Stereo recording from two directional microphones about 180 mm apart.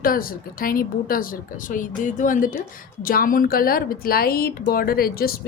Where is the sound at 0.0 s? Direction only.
55° left (ahead or behind).